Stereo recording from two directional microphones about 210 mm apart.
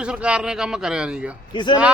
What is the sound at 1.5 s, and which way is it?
Speech, 20° left (ahead or behind).